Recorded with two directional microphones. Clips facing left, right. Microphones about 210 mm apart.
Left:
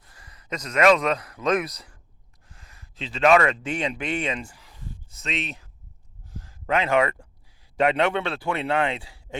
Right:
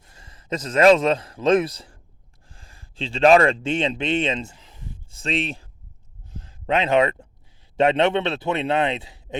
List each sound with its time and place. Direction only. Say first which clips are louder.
0.0 s a man's voice: right 2 dB; 25° right (ahead or behind)
6.3 s a sound: right 2 dB; 20° right (ahead or behind)
7.8 s a man's voice: right 3 dB; 25° right (ahead or behind)